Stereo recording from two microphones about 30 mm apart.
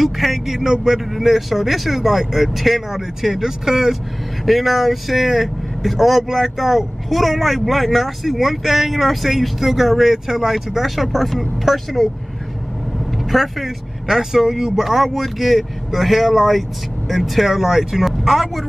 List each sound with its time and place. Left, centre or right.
0.0 s speech: centre
1.1 s speech: centre
10.5 s speech: centre
13.2 s speech: centre
15.0 s speech: centre